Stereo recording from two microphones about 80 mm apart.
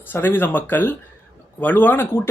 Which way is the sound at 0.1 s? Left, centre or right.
Left.